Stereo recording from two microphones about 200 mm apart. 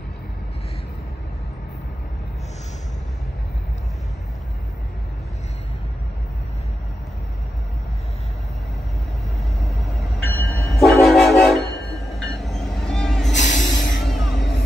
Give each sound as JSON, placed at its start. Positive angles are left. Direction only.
{"t": 9.6, "sound": "train", "side_deg": 0}
{"t": 13.7, "sound": "music", "side_deg": 60}
{"t": 14.0, "sound": "music", "side_deg": 0}
{"t": 14.3, "sound": "music", "side_deg": 60}